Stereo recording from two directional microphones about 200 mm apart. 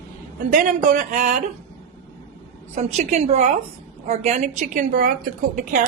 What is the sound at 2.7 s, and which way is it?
A woman's voice, 35° right (ahead or behind).